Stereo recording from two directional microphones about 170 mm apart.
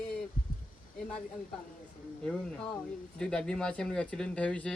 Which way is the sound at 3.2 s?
5° left (ahead or behind).